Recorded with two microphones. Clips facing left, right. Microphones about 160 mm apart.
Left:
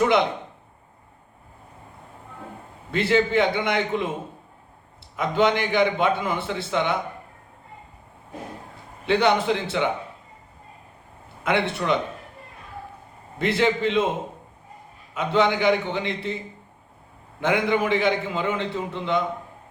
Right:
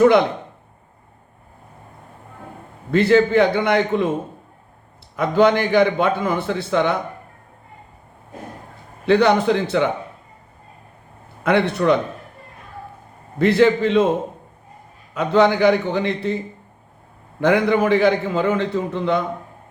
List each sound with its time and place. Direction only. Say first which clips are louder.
0.0 s speech: right 6 dB; 50° right (ahead or behind)
2.9 s a man's voice: right 6 dB; 45° right (ahead or behind)
5.1 s a man's voice: right 5 dB; 50° right (ahead or behind)
9.0 s a man's voice: right 5 dB; 45° right (ahead or behind)
11.4 s a man's voice: right 6 dB; 45° right (ahead or behind)
13.4 s a man's voice: right 7 dB; 45° right (ahead or behind)
15.1 s a man's voice: right 5 dB; 45° right (ahead or behind)
17.4 s a man's voice: right 6 dB; 45° right (ahead or behind)